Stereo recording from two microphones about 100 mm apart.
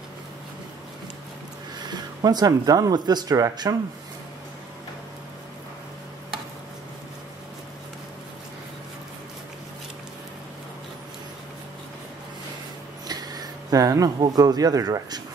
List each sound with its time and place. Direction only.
1.9 s speech: 40° right (ahead or behind)
13.0 s a sound: 40° right (ahead or behind)
14.2 s speech: 40° right (ahead or behind)